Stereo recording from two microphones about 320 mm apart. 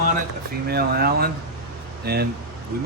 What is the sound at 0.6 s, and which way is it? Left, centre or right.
Speech, right.